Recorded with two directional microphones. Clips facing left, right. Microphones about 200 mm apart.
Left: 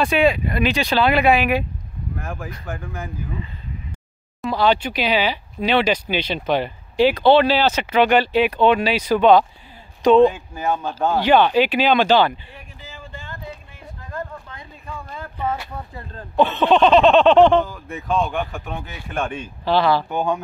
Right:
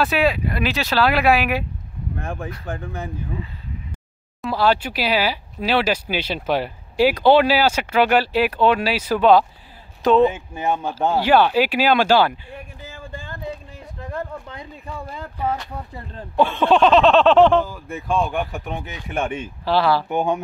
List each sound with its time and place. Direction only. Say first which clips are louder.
0.0 s speech: left 2 dB; 5° right (ahead or behind)
2.1 s speech: right 2 dB; 30° right (ahead or behind)
4.4 s speech: left 1 dB; 5° right (ahead or behind)
10.3 s speech: even; 25° right (ahead or behind)
10.9 s speech: left 1 dB; 5° right (ahead or behind)
14.1 s a sound: right 2 dB; 30° right (ahead or behind)
16.3 s speech: left 1 dB; 10° right (ahead or behind)
19.6 s speech: left 1 dB; 5° right (ahead or behind)
20.1 s speech: right 1 dB; 20° right (ahead or behind)